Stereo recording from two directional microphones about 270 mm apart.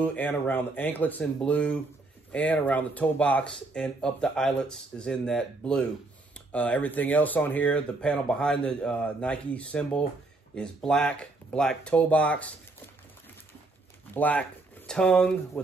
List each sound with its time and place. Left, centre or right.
0.0 s speech: centre
14.1 s speech: centre